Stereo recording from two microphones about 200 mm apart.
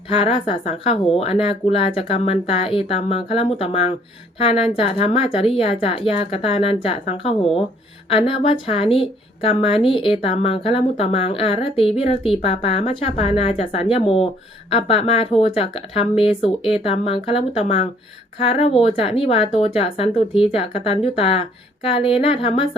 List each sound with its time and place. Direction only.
0.2 s a woman's voice: 30° left (ahead or behind)